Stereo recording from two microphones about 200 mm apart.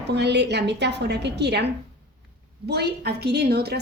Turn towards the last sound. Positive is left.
turn(degrees=-55)  # may be behind; listen again after turning